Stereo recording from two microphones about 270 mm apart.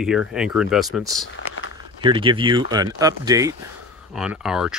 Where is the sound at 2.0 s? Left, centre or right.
Centre.